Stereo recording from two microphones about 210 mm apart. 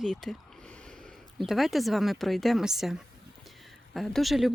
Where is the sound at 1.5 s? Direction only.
Centre (ahead or behind).